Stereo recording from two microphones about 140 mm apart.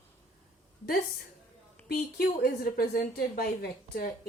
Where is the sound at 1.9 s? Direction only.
90° left.